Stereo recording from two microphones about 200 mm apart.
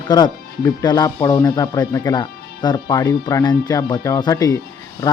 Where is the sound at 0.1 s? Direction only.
20° left (ahead or behind).